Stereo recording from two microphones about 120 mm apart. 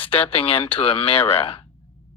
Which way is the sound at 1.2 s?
20° left (ahead or behind).